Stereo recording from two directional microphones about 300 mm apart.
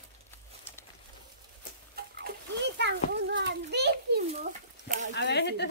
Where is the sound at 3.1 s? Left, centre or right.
Right.